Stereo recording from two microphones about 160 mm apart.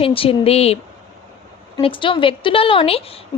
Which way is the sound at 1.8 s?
30° left (ahead or behind).